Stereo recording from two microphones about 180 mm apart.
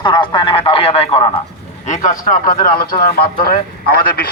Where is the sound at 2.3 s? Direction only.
50° left (ahead or behind).